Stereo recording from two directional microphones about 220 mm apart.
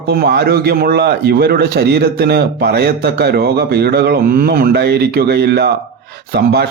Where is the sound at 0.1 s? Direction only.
45° right (ahead or behind).